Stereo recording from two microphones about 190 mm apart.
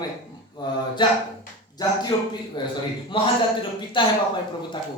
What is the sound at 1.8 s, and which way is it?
Speech, 20° left (ahead or behind).